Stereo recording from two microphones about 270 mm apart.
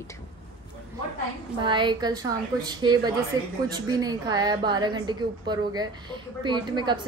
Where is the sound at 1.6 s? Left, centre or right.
Centre.